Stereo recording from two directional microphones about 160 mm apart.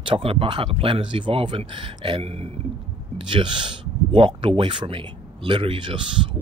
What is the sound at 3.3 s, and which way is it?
Speech, 30° right (ahead or behind).